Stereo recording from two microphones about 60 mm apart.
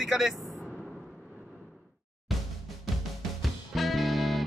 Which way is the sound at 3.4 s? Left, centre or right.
Centre.